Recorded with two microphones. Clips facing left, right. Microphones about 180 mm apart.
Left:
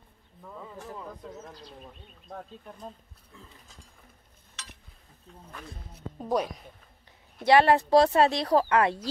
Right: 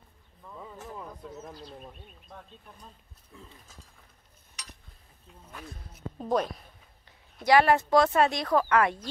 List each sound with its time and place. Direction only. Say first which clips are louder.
6.1 s a woman's voice: even; 10° left (ahead or behind)
7.4 s speech: left 1 dB; 30° left (ahead or behind)